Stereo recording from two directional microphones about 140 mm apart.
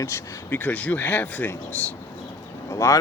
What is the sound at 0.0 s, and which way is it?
Speech, 20° left (ahead or behind).